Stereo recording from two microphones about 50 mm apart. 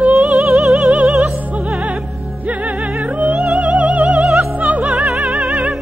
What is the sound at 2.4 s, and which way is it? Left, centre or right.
Music, right.